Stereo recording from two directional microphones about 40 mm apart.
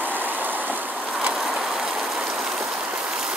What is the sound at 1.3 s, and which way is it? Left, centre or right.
Train, centre.